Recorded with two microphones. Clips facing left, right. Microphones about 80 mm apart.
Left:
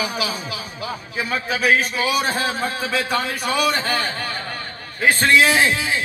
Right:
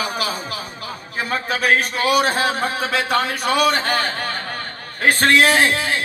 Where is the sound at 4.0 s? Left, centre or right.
Right.